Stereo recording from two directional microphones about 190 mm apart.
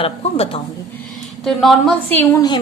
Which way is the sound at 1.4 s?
Centre (ahead or behind).